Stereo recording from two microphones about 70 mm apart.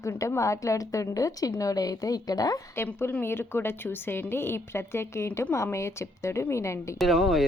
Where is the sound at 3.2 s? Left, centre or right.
Left.